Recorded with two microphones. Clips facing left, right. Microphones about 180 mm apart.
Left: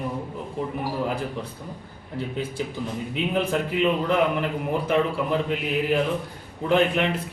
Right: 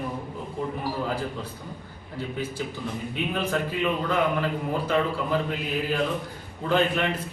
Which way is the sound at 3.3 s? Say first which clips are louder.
Left 4 dB; 20° left (ahead or behind).